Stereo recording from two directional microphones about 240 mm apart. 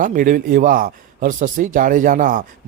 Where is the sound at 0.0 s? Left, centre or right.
Right.